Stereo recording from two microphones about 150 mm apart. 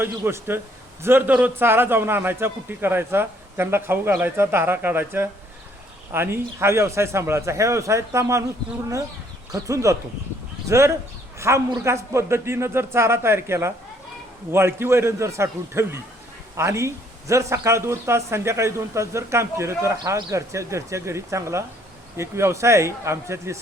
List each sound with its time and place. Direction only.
0.0 s a man's voice: 15° right (ahead or behind)
9.5 s a man's voice: 20° right (ahead or behind)